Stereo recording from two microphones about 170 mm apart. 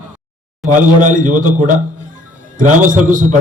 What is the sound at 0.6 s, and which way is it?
A man's voice, 50° right (ahead or behind).